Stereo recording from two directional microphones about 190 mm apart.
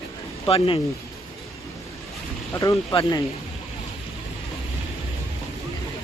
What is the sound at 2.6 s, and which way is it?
Speech, 20° left (ahead or behind).